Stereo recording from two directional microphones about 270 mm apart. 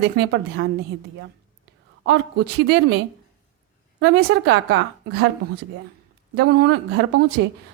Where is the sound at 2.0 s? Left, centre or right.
Right.